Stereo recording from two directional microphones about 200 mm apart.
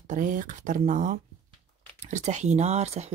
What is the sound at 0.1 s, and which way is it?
Speech, 40° right (ahead or behind).